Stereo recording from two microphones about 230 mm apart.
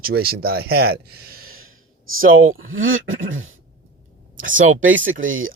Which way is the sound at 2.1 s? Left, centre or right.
Right.